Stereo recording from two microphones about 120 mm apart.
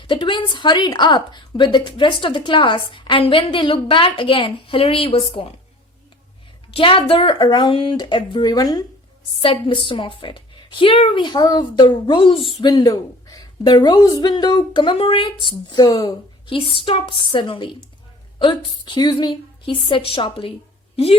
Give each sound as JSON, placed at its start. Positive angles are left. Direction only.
{"t": 0.0, "sound": "a woman's voice", "side_deg": 40}
{"t": 6.7, "sound": "a woman's voice", "side_deg": 50}
{"t": 9.4, "sound": "a woman's voice", "side_deg": 45}
{"t": 12.5, "sound": "a woman's voice", "side_deg": 35}
{"t": 16.5, "sound": "a woman's voice", "side_deg": 45}